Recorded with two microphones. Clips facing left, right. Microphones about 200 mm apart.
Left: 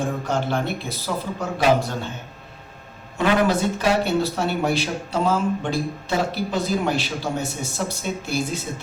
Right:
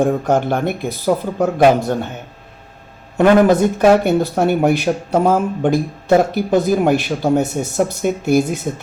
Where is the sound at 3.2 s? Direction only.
60° right (ahead or behind).